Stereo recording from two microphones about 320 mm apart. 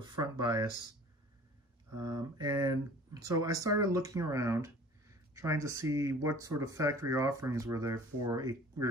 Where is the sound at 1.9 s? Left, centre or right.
Right.